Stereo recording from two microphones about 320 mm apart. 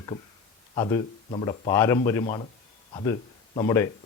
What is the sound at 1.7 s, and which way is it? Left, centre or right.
Speech, centre.